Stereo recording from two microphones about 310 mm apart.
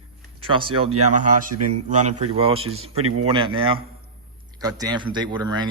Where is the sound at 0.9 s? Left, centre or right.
Right.